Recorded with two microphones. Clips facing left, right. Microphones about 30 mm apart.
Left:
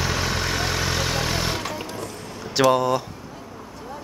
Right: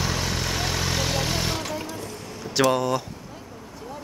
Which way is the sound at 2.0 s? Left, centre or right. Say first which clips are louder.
Left 2 dB; centre.